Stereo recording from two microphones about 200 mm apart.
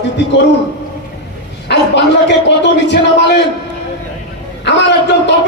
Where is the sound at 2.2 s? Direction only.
60° left (ahead or behind).